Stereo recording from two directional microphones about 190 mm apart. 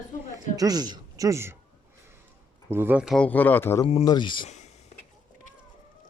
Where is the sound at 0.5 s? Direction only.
20° right (ahead or behind).